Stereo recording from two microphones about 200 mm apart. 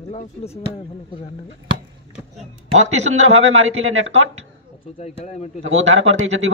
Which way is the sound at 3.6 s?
75° right (ahead or behind).